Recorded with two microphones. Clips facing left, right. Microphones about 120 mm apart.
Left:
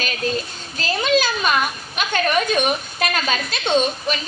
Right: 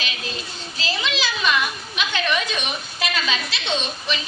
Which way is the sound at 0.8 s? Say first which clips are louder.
Left 8 dB; 50° left (ahead or behind).